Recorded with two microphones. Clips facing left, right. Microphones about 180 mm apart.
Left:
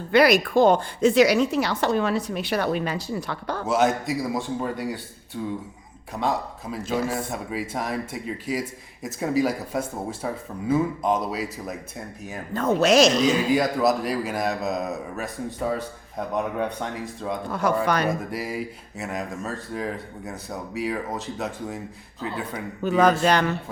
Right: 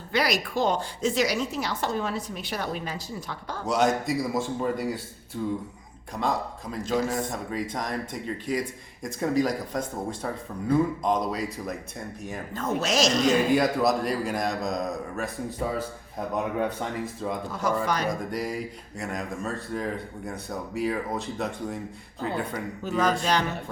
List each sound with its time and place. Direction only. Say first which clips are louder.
0.1 s a woman's voice: left 8 dB; 60° left (ahead or behind)
3.7 s a man's voice: left 1 dB; centre (ahead or behind)
12.5 s speech: left 8 dB; 60° left (ahead or behind)
13.2 s a man's voice: left 1 dB; centre (ahead or behind)
17.5 s speech: left 5 dB; 60° left (ahead or behind)
18.1 s a man's voice: left 1 dB; 5° left (ahead or behind)
22.8 s speech: left 7 dB; 60° left (ahead or behind)